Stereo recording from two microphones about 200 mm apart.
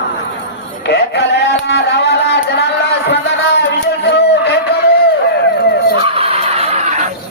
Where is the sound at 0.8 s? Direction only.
60° left (ahead or behind).